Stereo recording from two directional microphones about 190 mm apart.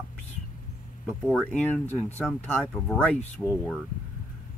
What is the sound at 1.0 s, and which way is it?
Speech, centre (ahead or behind).